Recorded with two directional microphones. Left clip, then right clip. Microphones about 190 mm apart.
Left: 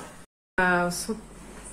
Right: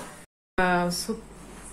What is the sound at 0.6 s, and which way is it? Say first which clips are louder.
Speech: left 1 dB; 5° right (ahead or behind).